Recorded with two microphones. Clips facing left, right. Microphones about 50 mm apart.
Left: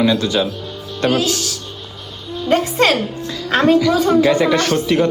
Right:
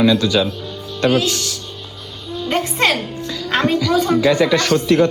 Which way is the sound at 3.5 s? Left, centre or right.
Left.